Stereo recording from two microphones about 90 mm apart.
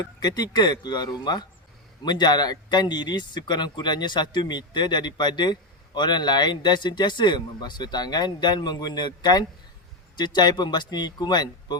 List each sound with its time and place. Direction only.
0.2 s speech: 50° left (ahead or behind)